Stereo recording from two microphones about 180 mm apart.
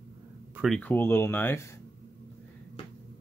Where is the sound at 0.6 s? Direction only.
5° left (ahead or behind).